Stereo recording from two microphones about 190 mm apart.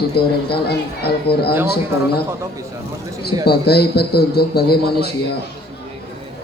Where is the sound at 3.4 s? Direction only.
55° left (ahead or behind).